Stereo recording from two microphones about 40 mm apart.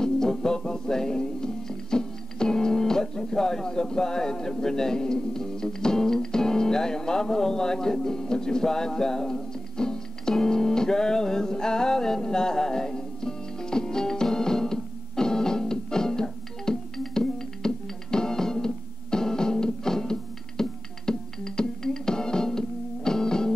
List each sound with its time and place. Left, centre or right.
0.0 s music: centre